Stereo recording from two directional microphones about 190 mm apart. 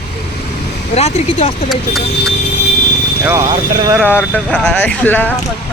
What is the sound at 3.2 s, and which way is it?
Speech, 10° right (ahead or behind).